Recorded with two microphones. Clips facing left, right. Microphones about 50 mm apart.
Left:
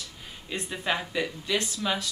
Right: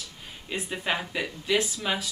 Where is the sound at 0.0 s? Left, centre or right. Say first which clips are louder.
Even; centre.